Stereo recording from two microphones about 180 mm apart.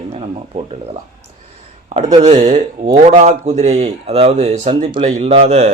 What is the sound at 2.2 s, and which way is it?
Speech, 40° right (ahead or behind).